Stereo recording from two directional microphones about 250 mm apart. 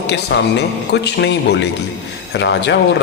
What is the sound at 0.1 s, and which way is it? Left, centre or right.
A man's voice, left.